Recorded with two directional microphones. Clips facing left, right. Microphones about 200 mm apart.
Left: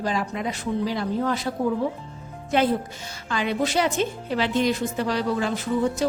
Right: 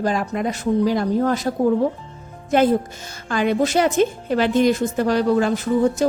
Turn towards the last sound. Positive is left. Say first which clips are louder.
# right 5 dB
turn(degrees=-45)  # may be behind; listen again after turning